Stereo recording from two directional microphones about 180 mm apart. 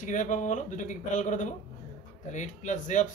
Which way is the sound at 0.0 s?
45° left (ahead or behind).